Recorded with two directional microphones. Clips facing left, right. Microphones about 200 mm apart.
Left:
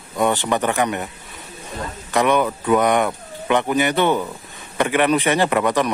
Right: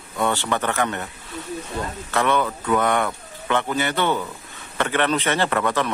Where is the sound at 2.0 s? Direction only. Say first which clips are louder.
Left 4 dB; 15° left (ahead or behind).